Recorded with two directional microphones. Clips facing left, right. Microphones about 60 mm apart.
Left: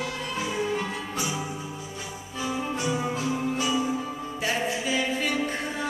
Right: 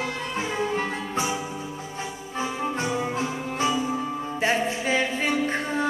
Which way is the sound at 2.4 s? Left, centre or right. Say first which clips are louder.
Right 2 dB; right.